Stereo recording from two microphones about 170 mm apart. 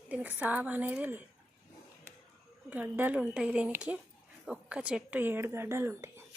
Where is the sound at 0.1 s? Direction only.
10° right (ahead or behind).